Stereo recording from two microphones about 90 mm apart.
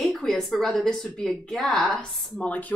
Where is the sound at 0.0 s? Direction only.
Centre (ahead or behind).